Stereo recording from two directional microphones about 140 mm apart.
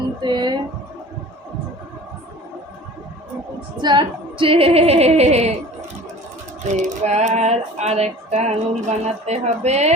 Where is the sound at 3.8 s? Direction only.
35° right (ahead or behind); by 5.5 s 50° right (ahead or behind).